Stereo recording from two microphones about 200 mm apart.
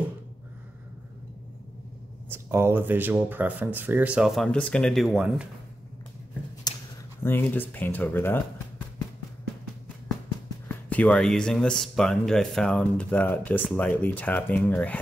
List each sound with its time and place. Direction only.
2.2 s speech: 10° right (ahead or behind)
6.7 s a sound: 20° left (ahead or behind)
7.2 s speech: 10° left (ahead or behind)
10.7 s speech: 5° left (ahead or behind)